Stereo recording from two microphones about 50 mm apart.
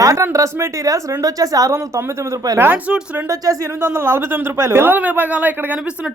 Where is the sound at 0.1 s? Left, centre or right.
Right.